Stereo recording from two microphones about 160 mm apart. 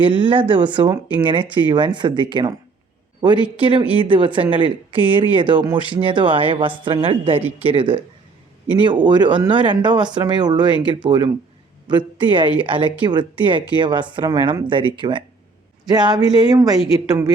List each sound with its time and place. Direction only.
0.0 s speech: 30° right (ahead or behind)
3.6 s speech: 35° right (ahead or behind)